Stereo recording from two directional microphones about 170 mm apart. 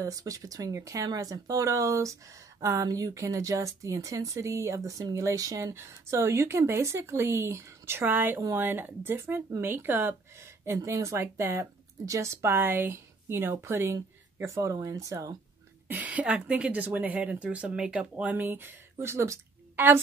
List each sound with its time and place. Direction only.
0.0 s speech: 20° right (ahead or behind)